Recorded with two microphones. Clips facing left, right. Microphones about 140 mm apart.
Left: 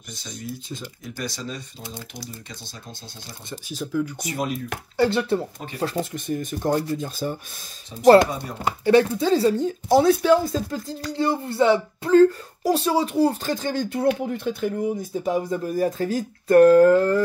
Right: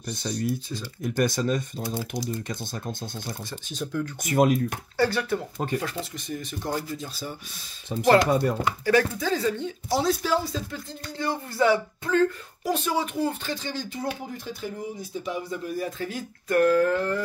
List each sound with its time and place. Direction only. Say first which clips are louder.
1.0 s speech: right 9 dB; 55° right (ahead or behind)
3.6 s speech: left 4 dB; 5° left (ahead or behind)
4.2 s speech: right 6 dB; 50° right (ahead or behind)
4.9 s speech: left 5 dB; 20° left (ahead or behind)
6.1 s speech: left 6 dB; 50° left (ahead or behind)
7.9 s speech: right 7 dB; 60° right (ahead or behind)
8.8 s speech: left 6 dB; 25° left (ahead or behind)
9.8 s speech: left 8 dB; 55° left (ahead or behind); by 11.0 s 40° left (ahead or behind)
11.1 s speech: left 5 dB; 30° left (ahead or behind)